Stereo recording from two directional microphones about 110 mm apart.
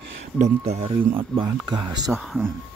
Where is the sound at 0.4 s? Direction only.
75° right (ahead or behind); by 1.4 s 55° right (ahead or behind).